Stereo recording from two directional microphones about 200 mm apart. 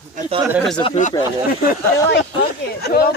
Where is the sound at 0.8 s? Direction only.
35° left (ahead or behind).